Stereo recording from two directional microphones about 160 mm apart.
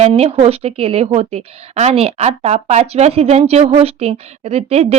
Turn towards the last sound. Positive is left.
turn(degrees=-40)  # may be behind; listen again after turning